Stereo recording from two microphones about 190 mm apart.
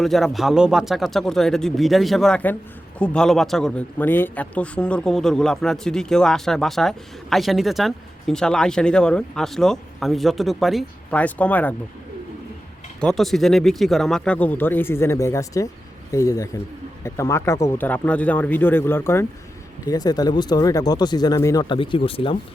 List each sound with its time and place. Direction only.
0.0 s a man's voice: centre (ahead or behind)
13.0 s speech: centre (ahead or behind); by 22.4 s 30° left (ahead or behind)